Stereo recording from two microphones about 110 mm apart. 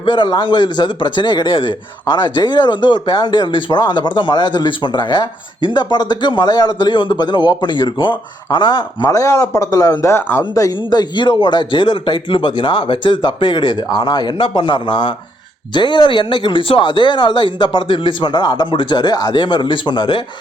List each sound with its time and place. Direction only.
0.0 s speech: 45° left (ahead or behind)
9.0 s speech: 30° left (ahead or behind)
10.5 s speech: 35° left (ahead or behind)